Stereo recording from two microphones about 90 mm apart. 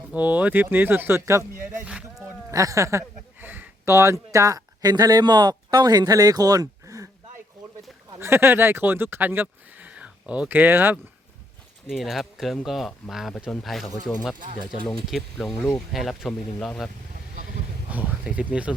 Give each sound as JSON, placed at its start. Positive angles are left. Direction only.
{"t": 0.1, "sound": "speech", "side_deg": -20}
{"t": 1.8, "sound": "music", "side_deg": -10}
{"t": 2.5, "sound": "speech", "side_deg": -35}
{"t": 3.4, "sound": "a sound", "side_deg": -20}
{"t": 3.9, "sound": "speech", "side_deg": -35}
{"t": 8.2, "sound": "speech", "side_deg": -25}
{"t": 11.9, "sound": "speech", "side_deg": -5}
{"t": 14.3, "sound": "speech", "side_deg": -60}
{"t": 15.0, "sound": "speech", "side_deg": 0}
{"t": 17.9, "sound": "speech", "side_deg": -15}